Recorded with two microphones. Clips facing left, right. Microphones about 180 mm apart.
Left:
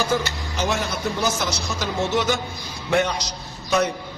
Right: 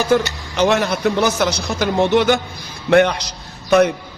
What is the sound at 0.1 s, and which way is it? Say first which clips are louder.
A man's voice: right 7 dB; 65° right (ahead or behind).